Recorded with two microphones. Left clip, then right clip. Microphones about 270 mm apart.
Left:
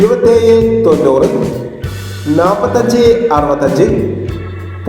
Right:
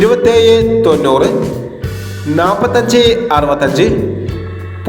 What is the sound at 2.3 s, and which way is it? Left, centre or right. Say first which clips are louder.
A man's voice: left 1 dB; right.